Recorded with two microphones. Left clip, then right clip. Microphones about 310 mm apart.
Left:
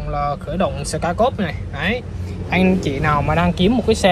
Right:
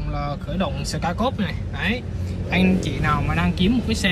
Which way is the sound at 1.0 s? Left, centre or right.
Centre.